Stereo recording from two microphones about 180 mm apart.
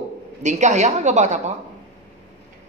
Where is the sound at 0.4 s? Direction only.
40° right (ahead or behind).